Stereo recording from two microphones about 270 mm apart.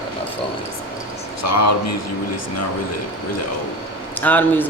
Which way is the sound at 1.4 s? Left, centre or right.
Left.